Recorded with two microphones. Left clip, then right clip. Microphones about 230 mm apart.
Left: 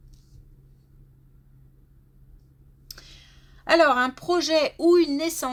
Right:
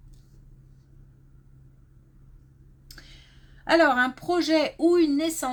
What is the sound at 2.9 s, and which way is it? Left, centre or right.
Speech, left.